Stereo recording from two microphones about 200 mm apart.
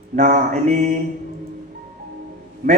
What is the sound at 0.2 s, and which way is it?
Speech, 45° right (ahead or behind).